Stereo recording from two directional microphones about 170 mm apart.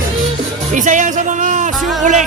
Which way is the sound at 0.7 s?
50° right (ahead or behind).